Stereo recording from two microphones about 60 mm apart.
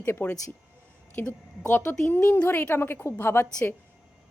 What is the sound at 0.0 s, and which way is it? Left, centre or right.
A woman's voice, left.